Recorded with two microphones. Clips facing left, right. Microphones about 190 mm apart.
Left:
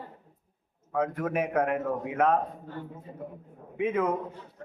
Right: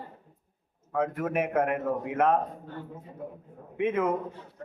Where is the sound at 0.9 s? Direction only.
Centre (ahead or behind).